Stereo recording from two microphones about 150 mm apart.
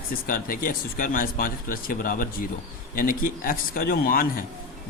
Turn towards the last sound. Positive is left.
turn(degrees=75)  # may be behind; listen again after turning